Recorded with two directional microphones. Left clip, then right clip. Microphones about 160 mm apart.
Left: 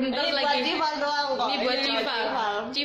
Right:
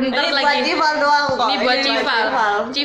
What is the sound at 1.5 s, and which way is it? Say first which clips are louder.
Speech: right 8 dB; 10° left (ahead or behind).